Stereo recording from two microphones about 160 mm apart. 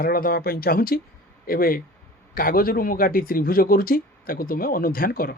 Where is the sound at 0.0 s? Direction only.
65° left (ahead or behind).